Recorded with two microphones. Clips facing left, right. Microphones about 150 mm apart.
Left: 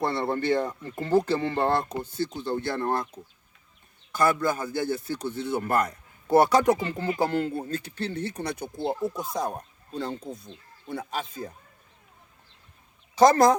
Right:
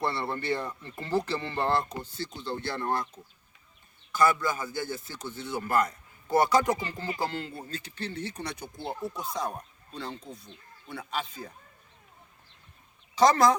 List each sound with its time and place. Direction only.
0.0 s speech: 50° left (ahead or behind)
4.2 s speech: 50° left (ahead or behind)
13.1 s speech: 45° left (ahead or behind)